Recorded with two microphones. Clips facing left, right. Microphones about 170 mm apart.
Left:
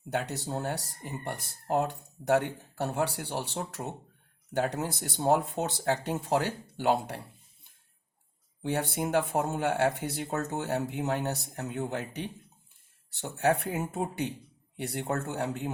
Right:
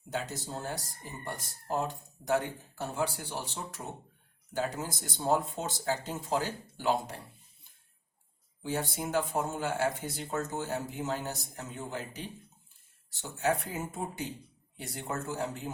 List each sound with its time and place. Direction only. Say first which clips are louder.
0.1 s speech: left 4 dB; 65° left (ahead or behind)
8.6 s speech: left 4 dB; 65° left (ahead or behind)